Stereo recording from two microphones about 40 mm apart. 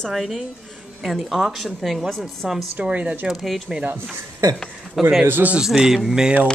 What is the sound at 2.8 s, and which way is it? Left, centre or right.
Speech, right.